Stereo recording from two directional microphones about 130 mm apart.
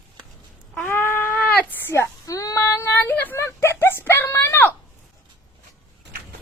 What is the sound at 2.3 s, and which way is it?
Child singing, 25° left (ahead or behind).